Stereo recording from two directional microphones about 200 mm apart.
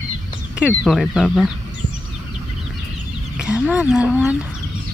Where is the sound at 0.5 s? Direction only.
5° right (ahead or behind).